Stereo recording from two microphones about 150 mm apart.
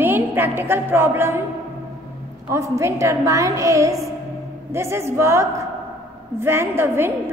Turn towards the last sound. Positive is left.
turn(degrees=-15)  # may be behind; listen again after turning